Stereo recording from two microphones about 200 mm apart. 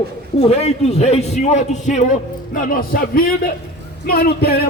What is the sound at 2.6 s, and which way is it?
A man's voice, 45° left (ahead or behind).